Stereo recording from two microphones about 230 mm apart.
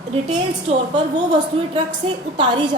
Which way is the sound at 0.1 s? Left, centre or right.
Right.